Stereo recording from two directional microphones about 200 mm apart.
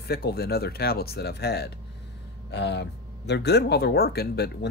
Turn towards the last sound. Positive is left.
turn(degrees=55)  # may be behind; listen again after turning